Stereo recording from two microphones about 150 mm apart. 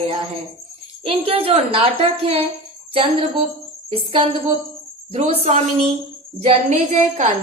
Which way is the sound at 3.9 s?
35° right (ahead or behind).